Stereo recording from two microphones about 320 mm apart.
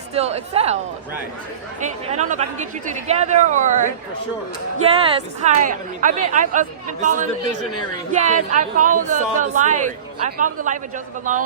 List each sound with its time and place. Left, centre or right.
0.1 s speech: centre
1.8 s speech: right
4.9 s speech: centre